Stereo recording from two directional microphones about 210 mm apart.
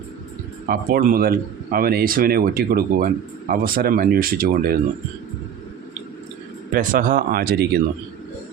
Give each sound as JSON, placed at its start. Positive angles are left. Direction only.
{"t": 0.7, "sound": "a man's voice", "side_deg": -45}
{"t": 6.7, "sound": "a man's voice", "side_deg": -40}